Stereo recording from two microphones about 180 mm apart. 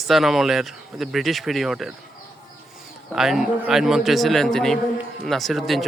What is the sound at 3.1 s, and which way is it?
Speech, centre (ahead or behind).